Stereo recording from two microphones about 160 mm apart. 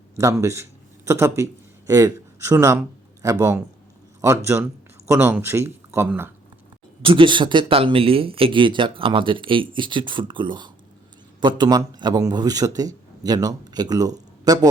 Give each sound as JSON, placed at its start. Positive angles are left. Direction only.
{"t": 0.2, "sound": "speech", "side_deg": -20}
{"t": 7.0, "sound": "a man's voice", "side_deg": -30}